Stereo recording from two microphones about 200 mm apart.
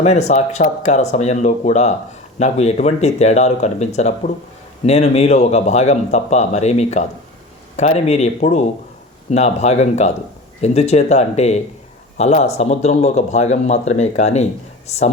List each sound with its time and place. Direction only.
0.0 s speech: 35° left (ahead or behind)